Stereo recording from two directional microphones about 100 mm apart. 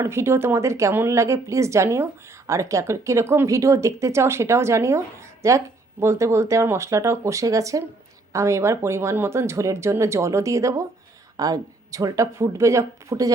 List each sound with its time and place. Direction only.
0.0 s speech: 25° right (ahead or behind)